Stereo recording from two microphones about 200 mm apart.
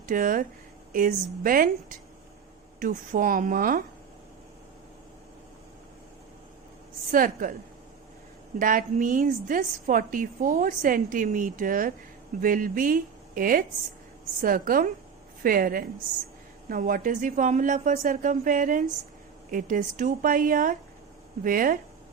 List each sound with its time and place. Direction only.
0.0 s a woman's voice: 45° right (ahead or behind)
7.1 s a woman's voice: 45° right (ahead or behind)
8.5 s a woman's voice: 45° right (ahead or behind)